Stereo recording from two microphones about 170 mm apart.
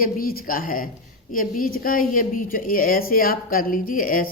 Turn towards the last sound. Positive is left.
turn(degrees=55)  # may be behind; listen again after turning